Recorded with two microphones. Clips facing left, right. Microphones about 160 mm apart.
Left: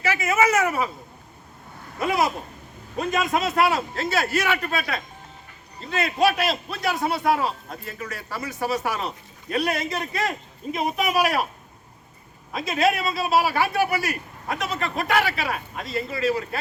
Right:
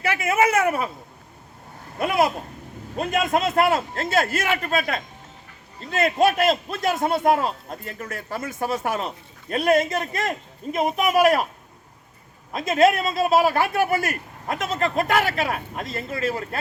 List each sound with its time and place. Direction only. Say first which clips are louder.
0.0 s speech: right 1 dB; 55° right (ahead or behind)
2.0 s babbling: right 2 dB; 55° right (ahead or behind)
3.0 s speech: right 2 dB; 55° right (ahead or behind)
6.0 s speech: right 3 dB; 50° right (ahead or behind)
12.5 s speech: right 4 dB; 50° right (ahead or behind)